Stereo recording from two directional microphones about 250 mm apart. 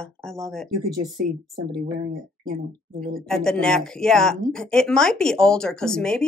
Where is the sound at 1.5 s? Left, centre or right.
Right.